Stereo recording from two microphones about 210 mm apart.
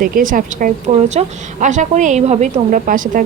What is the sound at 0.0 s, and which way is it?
A woman's voice, 40° right (ahead or behind).